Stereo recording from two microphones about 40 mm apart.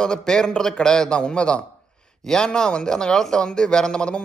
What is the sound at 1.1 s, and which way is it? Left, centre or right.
A man's voice, left.